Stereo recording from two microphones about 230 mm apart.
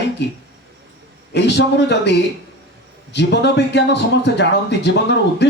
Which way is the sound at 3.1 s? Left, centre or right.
Left.